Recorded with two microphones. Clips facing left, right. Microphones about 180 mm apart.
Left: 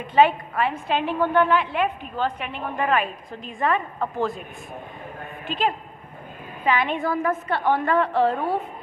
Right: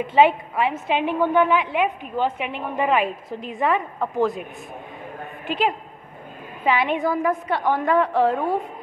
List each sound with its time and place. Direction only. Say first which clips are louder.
0.0 s a woman's voice: right 1 dB; 25° right (ahead or behind)
5.5 s a woman's voice: right 2 dB; 20° right (ahead or behind)
7.0 s a woman's voice: right 2 dB; centre (ahead or behind)